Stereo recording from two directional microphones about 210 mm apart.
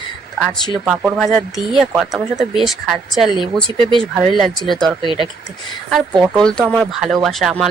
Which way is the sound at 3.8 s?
25° right (ahead or behind).